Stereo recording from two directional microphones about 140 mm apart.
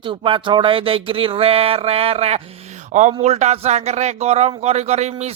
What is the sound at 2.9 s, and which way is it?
A man's voice, 60° right (ahead or behind).